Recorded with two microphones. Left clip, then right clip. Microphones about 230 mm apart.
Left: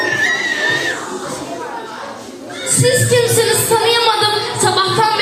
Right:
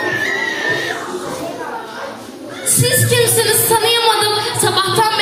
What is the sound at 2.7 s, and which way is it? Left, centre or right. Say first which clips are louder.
Music: left 2 dB; right.